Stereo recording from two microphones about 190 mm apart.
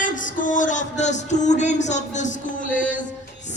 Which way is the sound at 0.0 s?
45° left (ahead or behind).